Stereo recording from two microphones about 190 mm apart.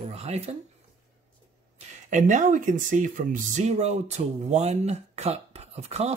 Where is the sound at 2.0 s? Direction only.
40° right (ahead or behind).